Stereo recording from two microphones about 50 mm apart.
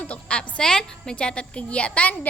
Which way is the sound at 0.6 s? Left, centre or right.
Centre.